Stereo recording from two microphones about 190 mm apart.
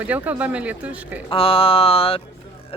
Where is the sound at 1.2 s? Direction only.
30° left (ahead or behind).